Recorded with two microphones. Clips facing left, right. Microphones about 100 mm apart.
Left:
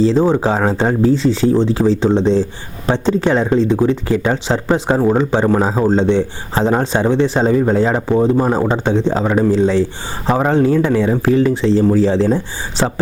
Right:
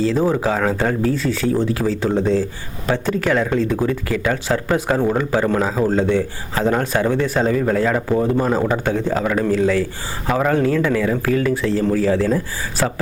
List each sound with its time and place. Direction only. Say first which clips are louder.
0.0 s speech: left 4 dB; 25° left (ahead or behind)